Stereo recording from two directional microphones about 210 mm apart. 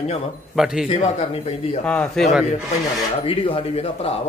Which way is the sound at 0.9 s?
30° left (ahead or behind).